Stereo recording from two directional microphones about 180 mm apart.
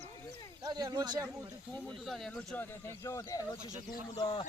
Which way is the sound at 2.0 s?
Centre (ahead or behind).